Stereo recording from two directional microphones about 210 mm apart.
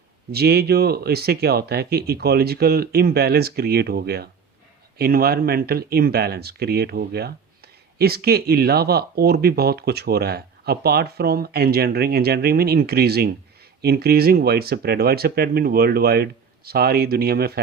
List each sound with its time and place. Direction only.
0.3 s speech: 50° right (ahead or behind)